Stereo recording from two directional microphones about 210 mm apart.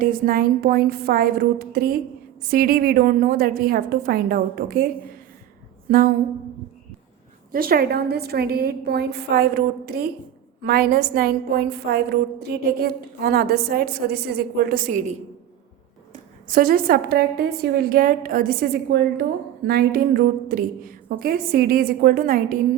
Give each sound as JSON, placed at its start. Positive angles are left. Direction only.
{"t": 0.0, "sound": "a woman's voice", "side_deg": -45}
{"t": 5.9, "sound": "a woman's voice", "side_deg": -40}
{"t": 7.5, "sound": "a woman's voice", "side_deg": -45}
{"t": 16.5, "sound": "a woman's voice", "side_deg": -45}